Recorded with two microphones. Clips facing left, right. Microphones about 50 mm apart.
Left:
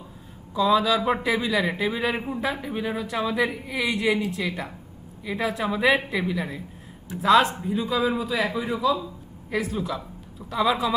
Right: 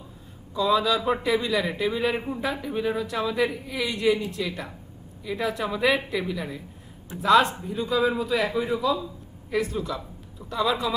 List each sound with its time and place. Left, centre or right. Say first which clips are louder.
0.5 s a man's voice: left 2 dB; centre
0.9 s a man's voice: left 1 dB; centre
1.2 s a man's voice: left 1 dB; centre
2.6 s a woman's voice: right 2 dB; centre
5.4 s a woman's voice: left 1 dB; centre
7.2 s a man's voice: left 1 dB; centre